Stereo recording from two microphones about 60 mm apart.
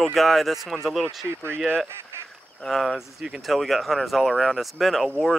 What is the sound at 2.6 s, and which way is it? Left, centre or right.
Speech, centre.